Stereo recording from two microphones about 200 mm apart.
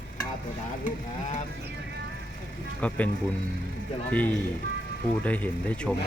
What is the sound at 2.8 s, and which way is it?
Speech, 5° left (ahead or behind).